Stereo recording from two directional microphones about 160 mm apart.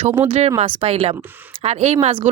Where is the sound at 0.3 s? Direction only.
45° right (ahead or behind).